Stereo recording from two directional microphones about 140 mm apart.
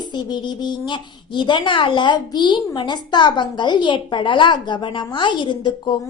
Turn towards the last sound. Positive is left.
turn(degrees=35)  # may be behind; listen again after turning